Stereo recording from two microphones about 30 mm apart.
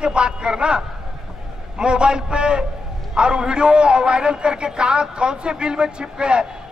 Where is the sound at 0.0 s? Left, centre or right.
Right.